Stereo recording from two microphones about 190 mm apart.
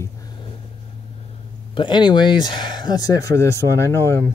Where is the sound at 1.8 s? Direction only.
25° left (ahead or behind).